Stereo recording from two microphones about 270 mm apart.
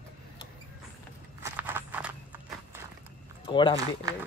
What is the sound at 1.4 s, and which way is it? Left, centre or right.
Walk, centre.